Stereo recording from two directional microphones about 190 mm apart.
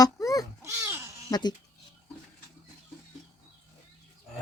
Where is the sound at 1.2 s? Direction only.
20° left (ahead or behind).